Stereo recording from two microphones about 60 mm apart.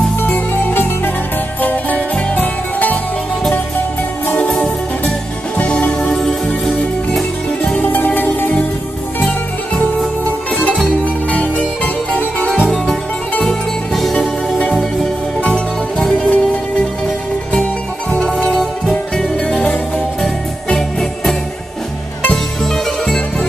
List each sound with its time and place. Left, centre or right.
0.2 s music: left
5.6 s music: centre
7.8 s music: left
11.2 s music: left
12.6 s music: centre
15.4 s music: centre
18.2 s music: centre